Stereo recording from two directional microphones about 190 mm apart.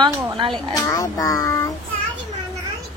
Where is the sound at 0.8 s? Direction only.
15° left (ahead or behind).